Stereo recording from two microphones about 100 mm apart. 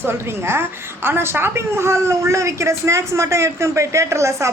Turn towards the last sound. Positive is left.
turn(degrees=-30)  # may be behind; listen again after turning